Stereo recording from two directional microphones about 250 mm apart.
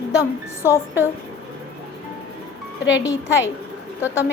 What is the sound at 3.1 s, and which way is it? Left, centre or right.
Speech, centre.